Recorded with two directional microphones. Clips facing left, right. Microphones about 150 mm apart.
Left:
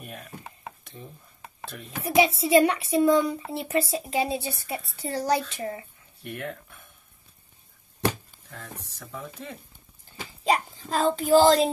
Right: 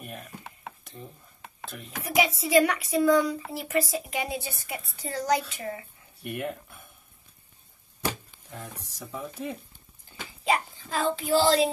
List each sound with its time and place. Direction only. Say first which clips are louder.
0.0 s stir: even; centre (ahead or behind)
1.6 s a child's voice: left 1 dB; centre (ahead or behind)
1.9 s a child's voice: left 4 dB; 30° left (ahead or behind)
6.2 s speech: right 2 dB; 15° right (ahead or behind)
8.5 s speech: right 1 dB; 15° right (ahead or behind)
10.4 s a child's voice: left 2 dB; 35° left (ahead or behind)